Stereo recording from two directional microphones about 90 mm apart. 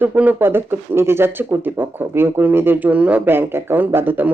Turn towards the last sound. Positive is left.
turn(degrees=-20)  # may be behind; listen again after turning